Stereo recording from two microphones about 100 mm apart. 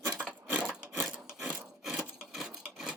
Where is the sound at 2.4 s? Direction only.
5° right (ahead or behind).